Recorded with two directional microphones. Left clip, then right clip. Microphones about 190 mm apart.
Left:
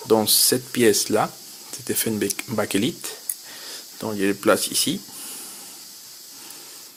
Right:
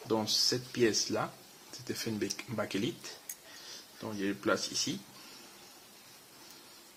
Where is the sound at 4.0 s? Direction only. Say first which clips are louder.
Left 13 dB; 45° left (ahead or behind).